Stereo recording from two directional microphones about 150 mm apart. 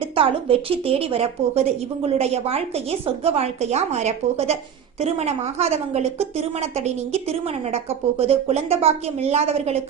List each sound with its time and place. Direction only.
0.0 s a woman's voice: 35° right (ahead or behind)